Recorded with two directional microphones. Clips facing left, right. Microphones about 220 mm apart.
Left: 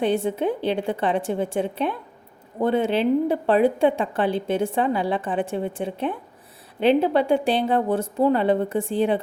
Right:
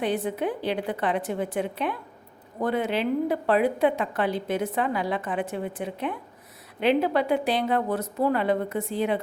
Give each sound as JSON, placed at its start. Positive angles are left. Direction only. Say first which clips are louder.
{"t": 0.0, "sound": "a woman's voice", "louder": "left 4 dB", "side_deg": 25}